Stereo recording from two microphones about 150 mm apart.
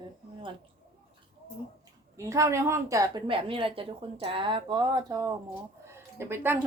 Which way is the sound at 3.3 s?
35° right (ahead or behind).